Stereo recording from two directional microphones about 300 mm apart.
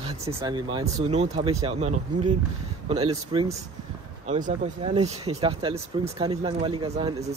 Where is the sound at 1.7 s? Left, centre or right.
Right.